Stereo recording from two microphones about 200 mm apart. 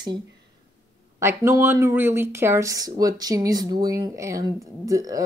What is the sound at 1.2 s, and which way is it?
Speech, 10° right (ahead or behind).